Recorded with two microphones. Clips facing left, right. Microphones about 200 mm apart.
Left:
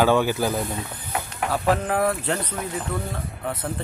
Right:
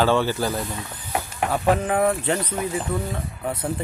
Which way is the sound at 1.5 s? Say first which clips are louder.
Right 1 dB; centre (ahead or behind).